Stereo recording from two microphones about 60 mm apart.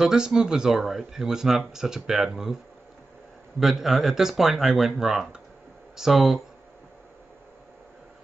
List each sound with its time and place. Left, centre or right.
0.0 s speech: centre
3.5 s speech: centre